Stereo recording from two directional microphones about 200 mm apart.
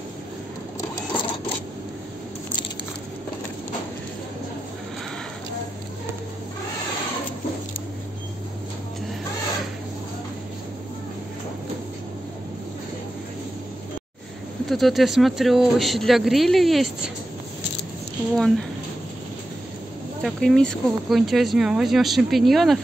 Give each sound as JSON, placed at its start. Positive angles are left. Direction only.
{"t": 0.7, "sound": "sewing machine", "side_deg": 25}
{"t": 14.7, "sound": "speech", "side_deg": 0}
{"t": 18.3, "sound": "speech", "side_deg": 0}
{"t": 20.2, "sound": "speech", "side_deg": 0}